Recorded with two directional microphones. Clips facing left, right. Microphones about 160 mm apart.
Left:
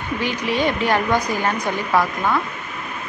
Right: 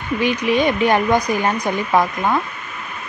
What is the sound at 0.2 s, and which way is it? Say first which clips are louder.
Speech: right 4 dB; 15° right (ahead or behind).